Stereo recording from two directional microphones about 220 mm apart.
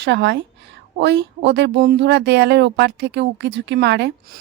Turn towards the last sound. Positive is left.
turn(degrees=-50)  # may be behind; listen again after turning